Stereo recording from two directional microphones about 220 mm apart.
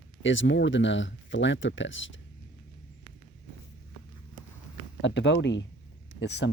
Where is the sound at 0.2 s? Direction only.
60° left (ahead or behind).